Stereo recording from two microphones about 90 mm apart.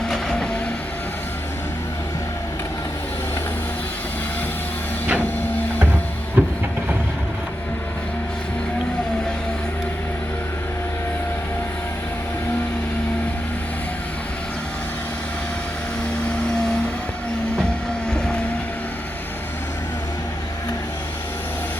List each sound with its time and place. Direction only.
0.1 s train: 5° left (ahead or behind)
6.4 s vehicle: 15° right (ahead or behind)